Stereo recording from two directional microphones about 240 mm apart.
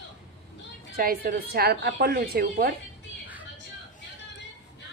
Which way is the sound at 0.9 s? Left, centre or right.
Right.